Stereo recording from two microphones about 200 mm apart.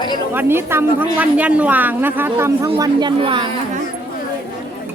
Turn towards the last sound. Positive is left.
turn(degrees=-25)  # may be behind; listen again after turning